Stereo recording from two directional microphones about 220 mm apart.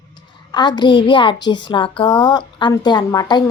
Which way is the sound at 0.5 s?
20° left (ahead or behind).